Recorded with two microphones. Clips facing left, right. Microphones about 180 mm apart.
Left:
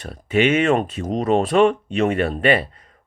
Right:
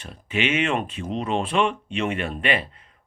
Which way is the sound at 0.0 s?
40° left (ahead or behind).